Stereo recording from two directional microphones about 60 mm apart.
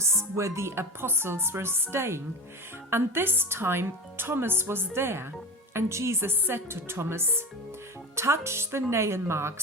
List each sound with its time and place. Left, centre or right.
0.0 s a woman's voice: right